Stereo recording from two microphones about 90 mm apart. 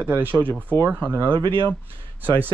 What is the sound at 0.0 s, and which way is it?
Speech, 20° right (ahead or behind).